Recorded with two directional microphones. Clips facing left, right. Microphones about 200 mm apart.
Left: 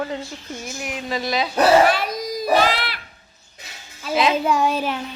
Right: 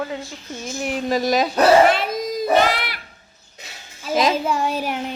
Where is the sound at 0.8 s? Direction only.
40° right (ahead or behind).